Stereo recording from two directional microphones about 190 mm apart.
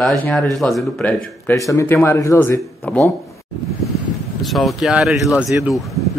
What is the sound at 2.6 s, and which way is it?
Speech, centre (ahead or behind).